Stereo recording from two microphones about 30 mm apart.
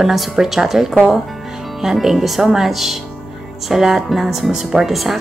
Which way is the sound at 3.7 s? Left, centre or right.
Centre.